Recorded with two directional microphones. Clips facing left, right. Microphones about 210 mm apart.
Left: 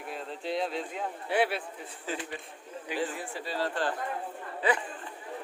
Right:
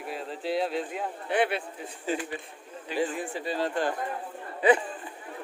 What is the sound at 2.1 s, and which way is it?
Speech, 15° right (ahead or behind).